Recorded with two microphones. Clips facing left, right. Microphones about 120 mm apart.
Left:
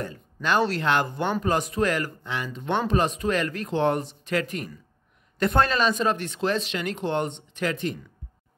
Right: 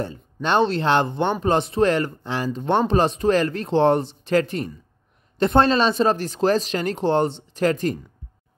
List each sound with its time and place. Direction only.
0.0 s speech: 30° right (ahead or behind)